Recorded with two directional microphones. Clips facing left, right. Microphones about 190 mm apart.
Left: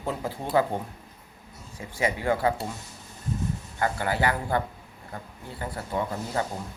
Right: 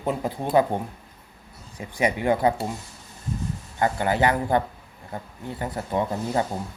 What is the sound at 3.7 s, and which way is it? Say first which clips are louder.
Speech: right 5 dB; 20° right (ahead or behind).